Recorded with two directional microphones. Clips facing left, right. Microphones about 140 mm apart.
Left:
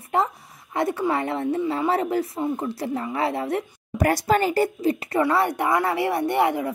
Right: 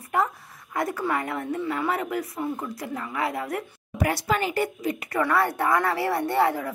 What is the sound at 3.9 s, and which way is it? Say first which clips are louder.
Speech: left 5 dB; 40° left (ahead or behind).